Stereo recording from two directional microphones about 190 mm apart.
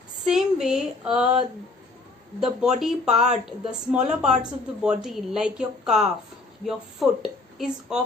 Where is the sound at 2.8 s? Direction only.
Centre (ahead or behind).